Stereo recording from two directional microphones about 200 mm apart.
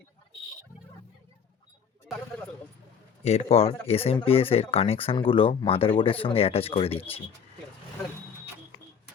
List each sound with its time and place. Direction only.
3.2 s speech: 30° left (ahead or behind)